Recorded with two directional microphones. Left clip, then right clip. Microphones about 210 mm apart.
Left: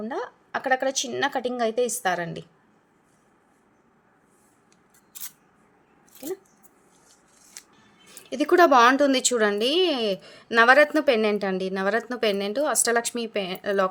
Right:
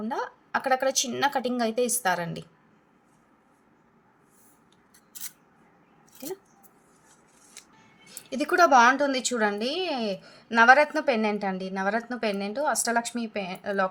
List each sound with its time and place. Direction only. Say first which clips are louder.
0.0 s speech: even; 10° left (ahead or behind)
6.2 s speech: left 4 dB; 15° left (ahead or behind)
8.3 s speech: left 2 dB; 15° left (ahead or behind); by 13.9 s 35° left (ahead or behind)